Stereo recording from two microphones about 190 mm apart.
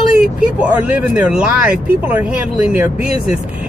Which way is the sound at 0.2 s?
5° right (ahead or behind).